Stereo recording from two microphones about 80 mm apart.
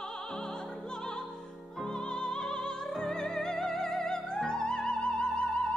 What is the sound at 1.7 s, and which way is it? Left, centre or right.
Music, centre.